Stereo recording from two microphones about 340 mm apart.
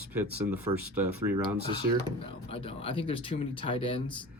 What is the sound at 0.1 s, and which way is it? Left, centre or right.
Speech, centre.